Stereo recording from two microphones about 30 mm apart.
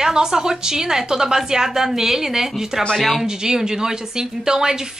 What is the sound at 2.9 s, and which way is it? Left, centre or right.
Speech, centre.